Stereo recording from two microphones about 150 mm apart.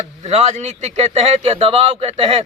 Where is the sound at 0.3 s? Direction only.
45° right (ahead or behind).